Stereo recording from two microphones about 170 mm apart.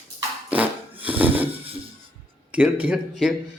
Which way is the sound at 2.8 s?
5° right (ahead or behind).